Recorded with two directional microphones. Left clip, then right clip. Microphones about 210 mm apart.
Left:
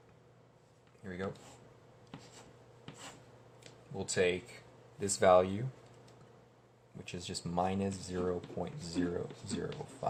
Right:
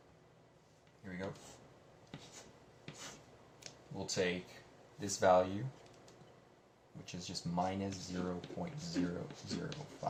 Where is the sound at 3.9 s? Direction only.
55° left (ahead or behind).